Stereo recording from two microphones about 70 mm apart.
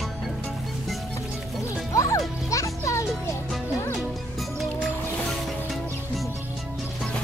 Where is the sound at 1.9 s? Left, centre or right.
Left.